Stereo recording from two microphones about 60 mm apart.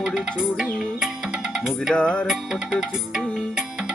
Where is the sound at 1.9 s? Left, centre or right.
Centre.